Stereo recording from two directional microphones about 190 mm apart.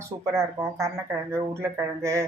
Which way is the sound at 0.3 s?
15° right (ahead or behind).